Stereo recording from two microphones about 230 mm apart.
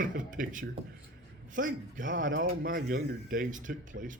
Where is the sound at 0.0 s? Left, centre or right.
Right.